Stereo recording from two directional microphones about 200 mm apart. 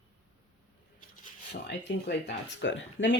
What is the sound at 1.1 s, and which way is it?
Cutlery, 40° left (ahead or behind).